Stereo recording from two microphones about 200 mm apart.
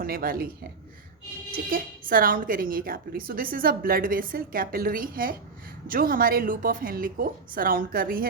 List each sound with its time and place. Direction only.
0.0 s a woman's voice: 50° right (ahead or behind)